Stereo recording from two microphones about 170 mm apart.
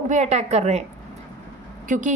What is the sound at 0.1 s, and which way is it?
Speech, 40° right (ahead or behind).